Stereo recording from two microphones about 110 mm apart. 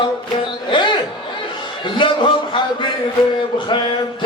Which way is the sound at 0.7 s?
45° left (ahead or behind).